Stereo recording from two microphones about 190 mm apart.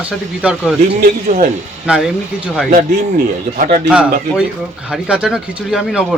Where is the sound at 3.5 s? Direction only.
45° right (ahead or behind).